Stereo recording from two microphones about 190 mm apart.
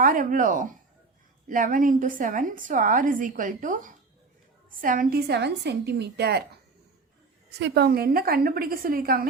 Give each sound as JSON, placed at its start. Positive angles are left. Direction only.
{"t": 0.0, "sound": "a woman's voice", "side_deg": -45}
{"t": 7.6, "sound": "a woman's voice", "side_deg": -60}